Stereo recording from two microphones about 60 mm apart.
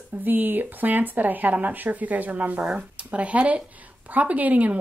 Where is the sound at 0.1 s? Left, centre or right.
Right.